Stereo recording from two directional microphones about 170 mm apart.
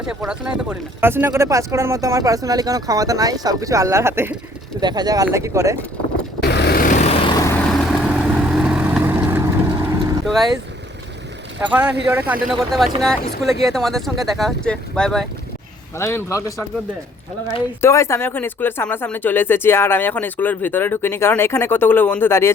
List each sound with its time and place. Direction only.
0.0 s speech: 5° right (ahead or behind)
4.8 s speech: 25° right (ahead or behind)
6.4 s vehicle: 75° left (ahead or behind); by 7.2 s 45° left (ahead or behind)
7.3 s vehicle: 20° left (ahead or behind)
7.7 s vehicle: centre (ahead or behind)
11.6 s speech: 10° right (ahead or behind)
16.0 s speech: 15° left (ahead or behind)
17.7 s speech: 15° left (ahead or behind)